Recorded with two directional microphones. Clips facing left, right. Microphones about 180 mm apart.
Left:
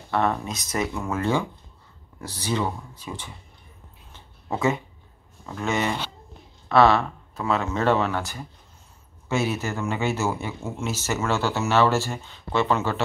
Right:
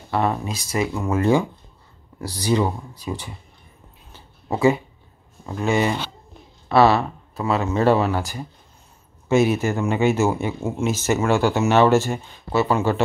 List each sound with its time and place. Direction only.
0.1 s speech: 5° right (ahead or behind)
5.4 s speech: 20° right (ahead or behind)
9.3 s speech: 15° right (ahead or behind)